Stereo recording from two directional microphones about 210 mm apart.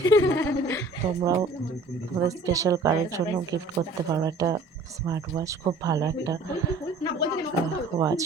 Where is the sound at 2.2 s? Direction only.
15° right (ahead or behind).